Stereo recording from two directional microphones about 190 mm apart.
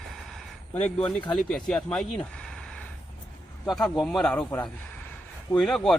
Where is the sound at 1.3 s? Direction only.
Centre (ahead or behind).